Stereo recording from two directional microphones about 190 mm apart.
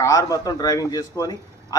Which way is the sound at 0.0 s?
15° left (ahead or behind).